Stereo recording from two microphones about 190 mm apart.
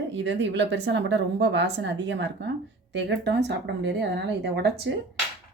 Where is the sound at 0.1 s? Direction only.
70° right (ahead or behind).